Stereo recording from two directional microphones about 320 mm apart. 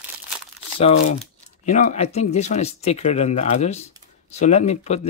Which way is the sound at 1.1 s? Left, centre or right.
Left.